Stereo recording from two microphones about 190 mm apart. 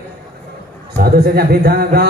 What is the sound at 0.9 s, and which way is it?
A man's voice, 55° right (ahead or behind).